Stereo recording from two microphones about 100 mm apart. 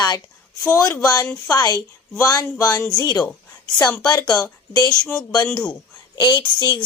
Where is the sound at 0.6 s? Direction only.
30° left (ahead or behind).